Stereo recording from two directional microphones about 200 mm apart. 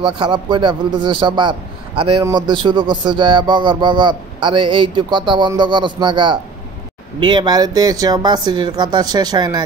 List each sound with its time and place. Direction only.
0.0 s speech: 25° right (ahead or behind)